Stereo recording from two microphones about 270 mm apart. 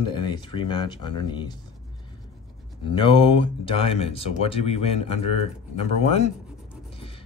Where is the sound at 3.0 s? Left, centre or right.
Centre.